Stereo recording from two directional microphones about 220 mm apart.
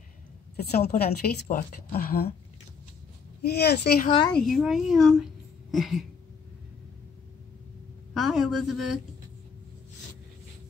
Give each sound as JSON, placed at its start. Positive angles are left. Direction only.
{"t": 0.7, "sound": "a woman's voice", "side_deg": 45}
{"t": 3.4, "sound": "a woman's voice", "side_deg": 45}
{"t": 4.3, "sound": "speech", "side_deg": 0}
{"t": 8.1, "sound": "a woman's voice", "side_deg": 0}